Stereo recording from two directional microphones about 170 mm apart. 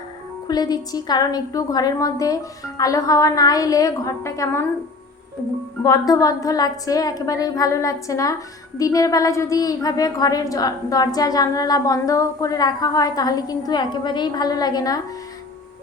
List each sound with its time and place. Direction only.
0.4 s a woman's voice: 25° left (ahead or behind)
5.8 s a woman's voice: 20° left (ahead or behind)